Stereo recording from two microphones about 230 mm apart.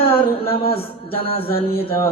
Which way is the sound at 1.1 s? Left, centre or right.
Left.